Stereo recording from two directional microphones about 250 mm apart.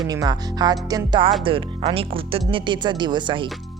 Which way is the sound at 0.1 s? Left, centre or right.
Centre.